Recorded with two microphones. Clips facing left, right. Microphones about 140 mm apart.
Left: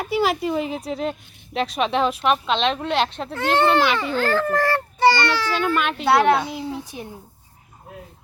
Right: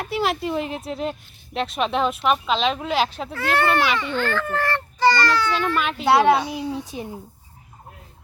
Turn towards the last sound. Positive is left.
turn(degrees=-20)  # may be behind; listen again after turning